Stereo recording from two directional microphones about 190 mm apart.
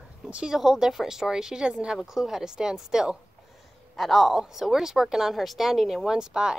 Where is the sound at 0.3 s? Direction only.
5° right (ahead or behind).